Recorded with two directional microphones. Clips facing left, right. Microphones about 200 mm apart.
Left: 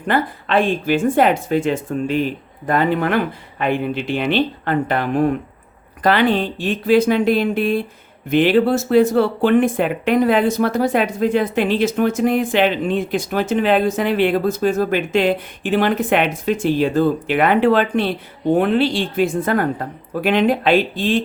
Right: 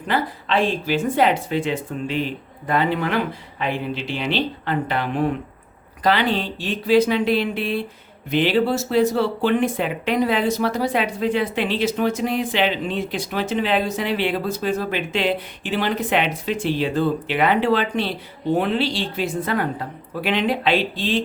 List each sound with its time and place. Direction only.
0.1 s speech: 55° left (ahead or behind)